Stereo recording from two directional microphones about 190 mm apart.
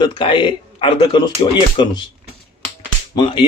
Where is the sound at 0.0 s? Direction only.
25° left (ahead or behind).